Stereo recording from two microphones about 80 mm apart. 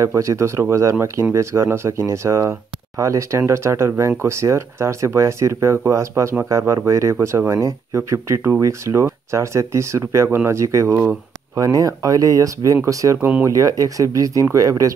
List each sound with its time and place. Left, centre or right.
0.0 s speech: right
11.5 s speech: right